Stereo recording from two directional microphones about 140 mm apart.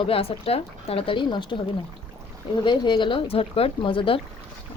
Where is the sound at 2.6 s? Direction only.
35° left (ahead or behind).